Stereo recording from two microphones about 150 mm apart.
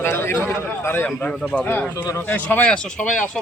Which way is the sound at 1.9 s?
25° left (ahead or behind).